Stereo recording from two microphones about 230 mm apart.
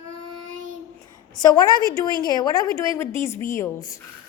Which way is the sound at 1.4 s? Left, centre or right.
Centre.